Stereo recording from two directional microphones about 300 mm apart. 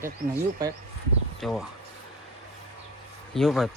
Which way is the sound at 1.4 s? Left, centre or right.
Centre.